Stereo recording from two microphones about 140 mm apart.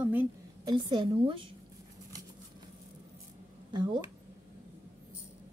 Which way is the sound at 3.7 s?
35° right (ahead or behind).